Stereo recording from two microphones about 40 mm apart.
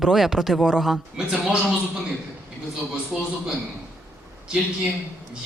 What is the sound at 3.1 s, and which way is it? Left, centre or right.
Speech, centre.